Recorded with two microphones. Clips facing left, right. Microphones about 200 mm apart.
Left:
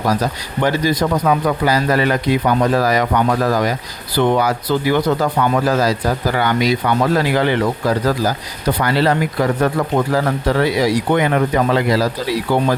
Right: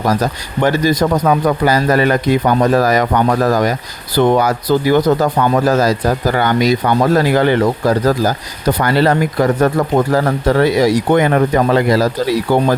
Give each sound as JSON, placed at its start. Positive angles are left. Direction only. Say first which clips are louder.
{"t": 0.1, "sound": "a man's voice", "louder": "right 2 dB", "side_deg": -45}